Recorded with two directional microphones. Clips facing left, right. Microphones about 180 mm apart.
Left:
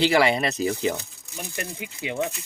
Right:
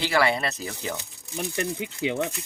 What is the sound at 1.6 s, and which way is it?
Speech, 25° right (ahead or behind).